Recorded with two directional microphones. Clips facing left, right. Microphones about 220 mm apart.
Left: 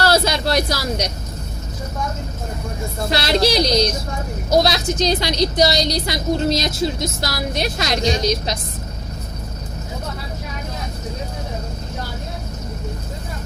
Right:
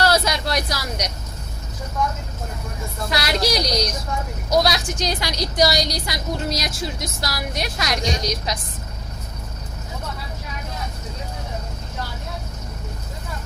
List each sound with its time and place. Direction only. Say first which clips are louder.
0.0 s speech: left 3 dB; 30° left (ahead or behind)
3.1 s a woman's voice: left 4 dB; 30° left (ahead or behind)